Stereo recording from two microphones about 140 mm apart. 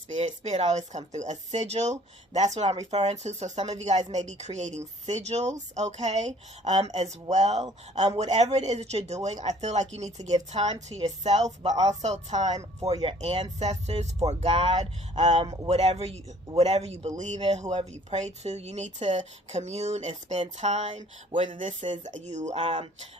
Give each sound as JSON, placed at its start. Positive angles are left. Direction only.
{"t": 0.1, "sound": "speech", "side_deg": -55}
{"t": 12.8, "sound": "speech", "side_deg": -45}
{"t": 14.8, "sound": "speech", "side_deg": -50}
{"t": 22.5, "sound": "speech", "side_deg": -40}